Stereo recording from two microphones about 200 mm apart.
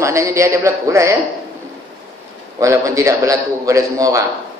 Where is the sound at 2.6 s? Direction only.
15° right (ahead or behind).